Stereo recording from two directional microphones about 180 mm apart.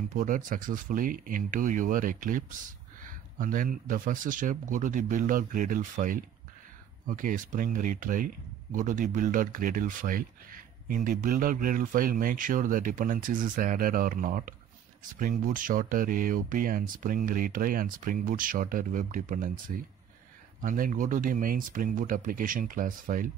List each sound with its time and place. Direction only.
0.1 s speech: 45° right (ahead or behind)